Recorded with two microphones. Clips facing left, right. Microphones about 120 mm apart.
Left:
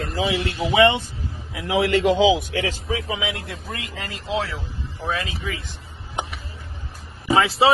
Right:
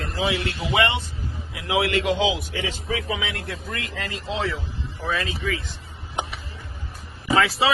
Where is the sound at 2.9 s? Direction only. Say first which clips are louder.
Left 1 dB; 25° left (ahead or behind).